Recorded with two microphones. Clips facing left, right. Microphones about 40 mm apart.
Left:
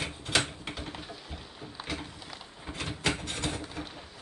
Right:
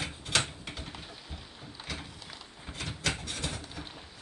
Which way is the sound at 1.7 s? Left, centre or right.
Centre.